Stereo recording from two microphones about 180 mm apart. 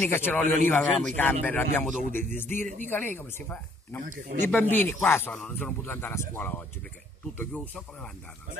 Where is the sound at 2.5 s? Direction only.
45° right (ahead or behind).